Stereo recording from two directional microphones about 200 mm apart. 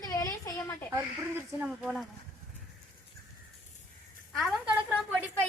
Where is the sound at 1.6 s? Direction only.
5° right (ahead or behind).